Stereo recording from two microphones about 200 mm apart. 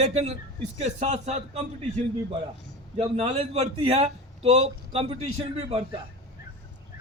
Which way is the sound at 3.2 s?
30° right (ahead or behind).